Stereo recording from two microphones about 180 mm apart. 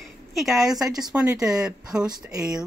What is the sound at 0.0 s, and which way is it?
A woman's voice, centre (ahead or behind).